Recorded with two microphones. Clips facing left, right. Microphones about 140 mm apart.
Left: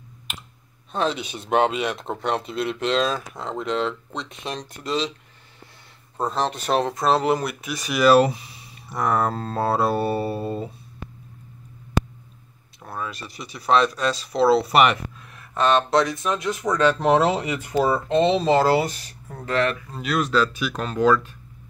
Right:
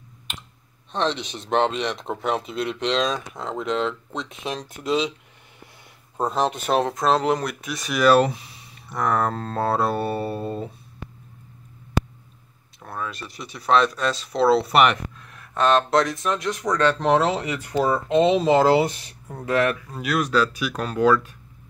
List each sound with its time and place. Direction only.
0.9 s speech: 5° left (ahead or behind)
6.1 s speech: 5° right (ahead or behind)
12.8 s speech: 5° left (ahead or behind)
18.0 s speech: 15° right (ahead or behind)
19.3 s speech: 10° right (ahead or behind)